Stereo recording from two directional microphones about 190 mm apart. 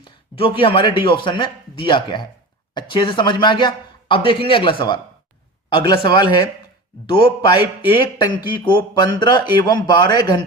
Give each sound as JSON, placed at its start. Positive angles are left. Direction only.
{"t": 0.0, "sound": "a man's voice", "side_deg": 30}